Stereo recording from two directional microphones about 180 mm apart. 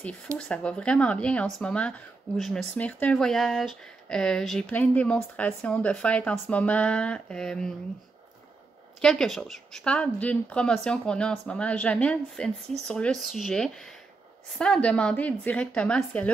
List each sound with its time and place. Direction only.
0.4 s speech: 5° left (ahead or behind)
9.0 s a woman's voice: centre (ahead or behind)